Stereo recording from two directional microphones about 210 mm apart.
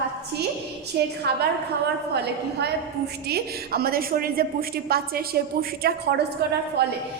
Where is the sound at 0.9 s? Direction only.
50° right (ahead or behind).